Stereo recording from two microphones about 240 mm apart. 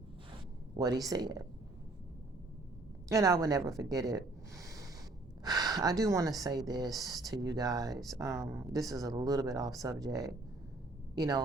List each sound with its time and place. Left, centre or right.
0.8 s speech: centre
3.1 s a woman's voice: centre